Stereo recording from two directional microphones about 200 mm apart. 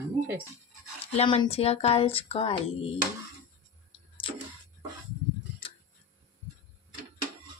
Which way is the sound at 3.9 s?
25° left (ahead or behind).